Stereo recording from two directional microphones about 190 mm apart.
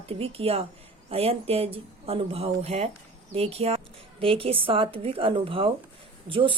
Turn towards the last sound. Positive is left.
turn(degrees=-25)  # may be behind; listen again after turning